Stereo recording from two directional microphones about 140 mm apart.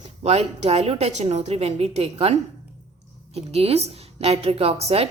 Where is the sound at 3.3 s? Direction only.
45° right (ahead or behind).